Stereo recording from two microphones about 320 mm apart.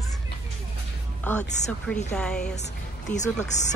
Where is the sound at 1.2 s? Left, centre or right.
Centre.